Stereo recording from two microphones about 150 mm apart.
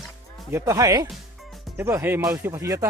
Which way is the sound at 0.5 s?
20° right (ahead or behind).